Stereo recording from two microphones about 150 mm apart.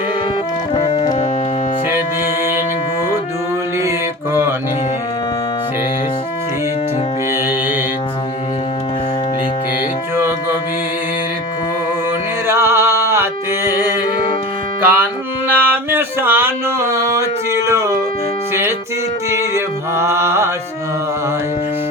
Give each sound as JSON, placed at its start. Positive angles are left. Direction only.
{"t": 0.7, "sound": "music", "side_deg": 35}
{"t": 10.2, "sound": "music", "side_deg": -15}
{"t": 12.5, "sound": "music", "side_deg": -15}
{"t": 14.8, "sound": "music", "side_deg": -10}
{"t": 15.4, "sound": "a sound", "side_deg": -15}
{"t": 19.5, "sound": "mantra", "side_deg": -20}